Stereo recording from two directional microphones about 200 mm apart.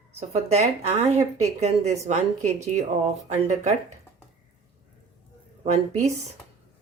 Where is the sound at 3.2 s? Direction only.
35° right (ahead or behind).